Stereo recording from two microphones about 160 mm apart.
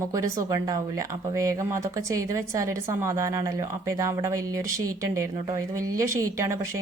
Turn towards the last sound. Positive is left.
turn(degrees=-20)  # may be behind; listen again after turning